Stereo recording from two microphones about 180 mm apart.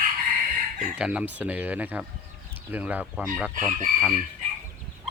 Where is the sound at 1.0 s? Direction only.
5° right (ahead or behind).